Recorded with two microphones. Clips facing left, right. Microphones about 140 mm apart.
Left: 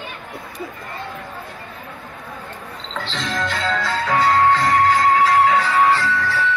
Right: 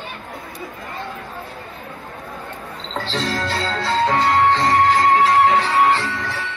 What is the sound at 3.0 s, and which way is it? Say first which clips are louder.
Music: right 1 dB; 35° right (ahead or behind).